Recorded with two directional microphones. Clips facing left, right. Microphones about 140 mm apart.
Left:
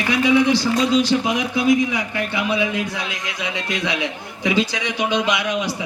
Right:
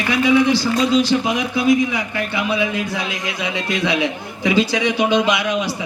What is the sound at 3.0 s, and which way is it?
A man's voice, 20° right (ahead or behind).